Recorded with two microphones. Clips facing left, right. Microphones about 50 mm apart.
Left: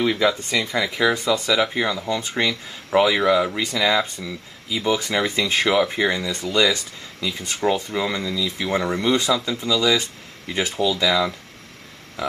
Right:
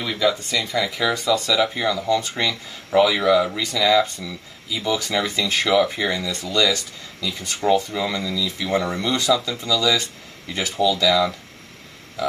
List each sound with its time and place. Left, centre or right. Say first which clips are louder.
0.0 s speech: left 2 dB; left
3.5 s speech: right 2 dB; left
12.2 s a sound: right 2 dB; left